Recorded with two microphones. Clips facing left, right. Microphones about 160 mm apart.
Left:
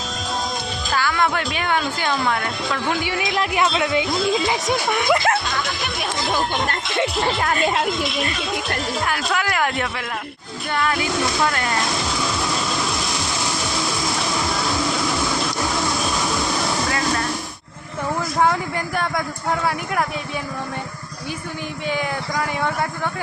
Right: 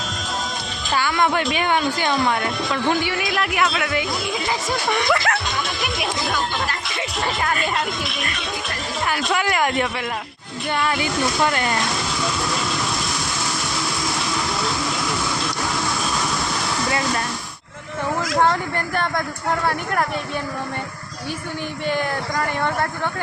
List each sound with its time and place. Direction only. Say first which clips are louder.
1.2 s speech: right 2 dB; 10° right (ahead or behind)
3.2 s speech: left 1 dB; 25° left (ahead or behind)
4.9 s speech: right 1 dB; 10° left (ahead or behind)
5.1 s speech: left 3 dB; 20° left (ahead or behind)
7.2 s speech: right 1 dB; 30° left (ahead or behind)
9.0 s speech: right 5 dB; 5° right (ahead or behind)
18.3 s speech: even; 5° left (ahead or behind)
21.8 s speech: right 1 dB; 5° left (ahead or behind)